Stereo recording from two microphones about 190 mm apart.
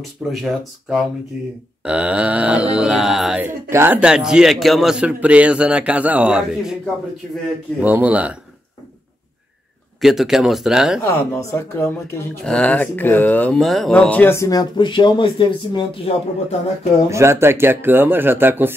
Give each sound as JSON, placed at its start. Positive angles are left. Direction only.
{"t": 0.3, "sound": "a man's voice", "side_deg": 0}
{"t": 7.8, "sound": "speech", "side_deg": -10}
{"t": 9.9, "sound": "a man's voice", "side_deg": 0}
{"t": 11.1, "sound": "speech", "side_deg": 15}
{"t": 17.1, "sound": "speech", "side_deg": -15}